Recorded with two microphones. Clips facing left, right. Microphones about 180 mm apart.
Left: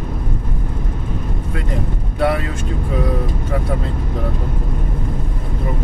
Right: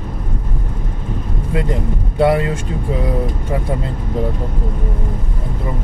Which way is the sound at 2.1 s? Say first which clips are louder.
Right 4 dB; 25° right (ahead or behind).